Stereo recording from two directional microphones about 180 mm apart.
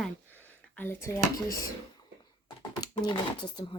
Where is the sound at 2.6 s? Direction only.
25° left (ahead or behind).